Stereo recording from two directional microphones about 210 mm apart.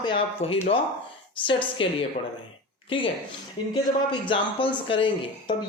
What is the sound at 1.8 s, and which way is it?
Speech, 25° left (ahead or behind).